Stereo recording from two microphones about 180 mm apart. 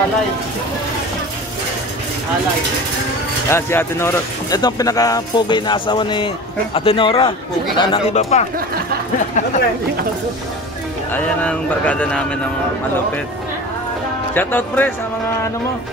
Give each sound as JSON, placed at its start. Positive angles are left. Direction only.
{"t": 3.4, "sound": "speech", "side_deg": 15}
{"t": 11.1, "sound": "speech", "side_deg": 5}
{"t": 14.3, "sound": "speech", "side_deg": 10}